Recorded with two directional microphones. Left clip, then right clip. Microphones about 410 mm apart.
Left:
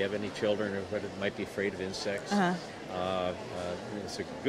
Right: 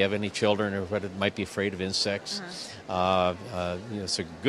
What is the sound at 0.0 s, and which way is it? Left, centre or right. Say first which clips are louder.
Speech: right 6 dB; right.